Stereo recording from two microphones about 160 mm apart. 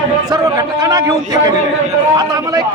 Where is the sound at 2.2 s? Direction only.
25° right (ahead or behind).